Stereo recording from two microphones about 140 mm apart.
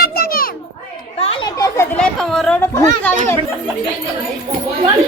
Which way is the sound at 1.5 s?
25° left (ahead or behind).